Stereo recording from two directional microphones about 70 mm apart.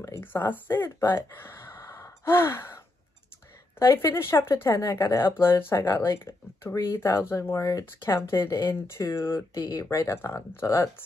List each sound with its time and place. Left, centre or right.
0.2 s speech: left
3.8 s speech: left
9.6 s speech: left
9.8 s speech: left